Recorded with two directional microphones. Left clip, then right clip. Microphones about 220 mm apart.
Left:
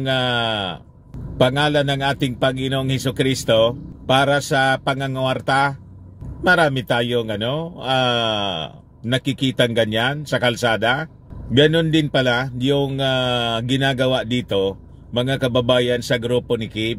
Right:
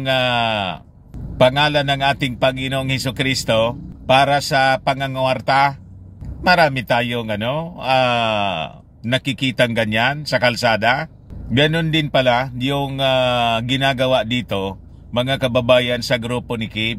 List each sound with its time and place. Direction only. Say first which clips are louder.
0.1 s speech: right 3 dB; 20° right (ahead or behind)